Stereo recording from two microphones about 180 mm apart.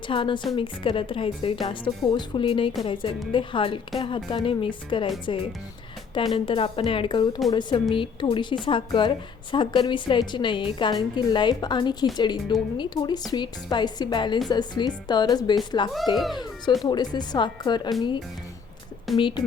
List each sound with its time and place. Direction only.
0.1 s a woman's voice: 30° left (ahead or behind)
6.1 s a woman's voice: 30° left (ahead or behind)
16.1 s a child's voice: centre (ahead or behind)
16.8 s a woman's voice: 25° left (ahead or behind)
19.1 s speech: centre (ahead or behind)